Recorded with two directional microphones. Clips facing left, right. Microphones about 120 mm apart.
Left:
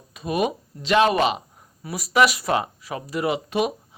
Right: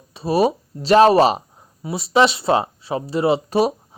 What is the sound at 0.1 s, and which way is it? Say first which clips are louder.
Speech: right 6 dB; 30° right (ahead or behind).